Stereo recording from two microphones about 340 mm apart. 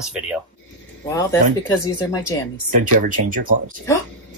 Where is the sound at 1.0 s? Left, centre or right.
Centre.